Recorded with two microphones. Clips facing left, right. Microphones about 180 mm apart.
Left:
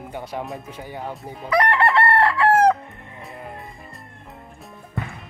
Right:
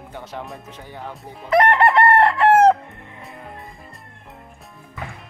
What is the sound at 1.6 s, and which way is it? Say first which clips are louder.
Chicken: right 4 dB; 20° right (ahead or behind).